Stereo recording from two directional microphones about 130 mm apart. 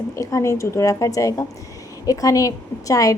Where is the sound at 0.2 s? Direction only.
25° left (ahead or behind).